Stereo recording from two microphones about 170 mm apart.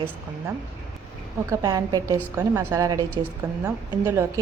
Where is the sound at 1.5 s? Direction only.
20° right (ahead or behind).